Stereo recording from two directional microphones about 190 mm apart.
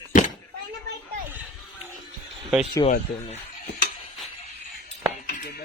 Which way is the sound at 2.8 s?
25° left (ahead or behind).